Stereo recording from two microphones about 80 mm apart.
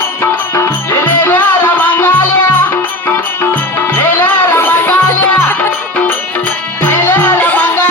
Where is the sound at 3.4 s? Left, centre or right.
Left.